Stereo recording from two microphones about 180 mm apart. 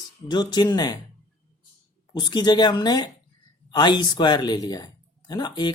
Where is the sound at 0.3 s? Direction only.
25° left (ahead or behind).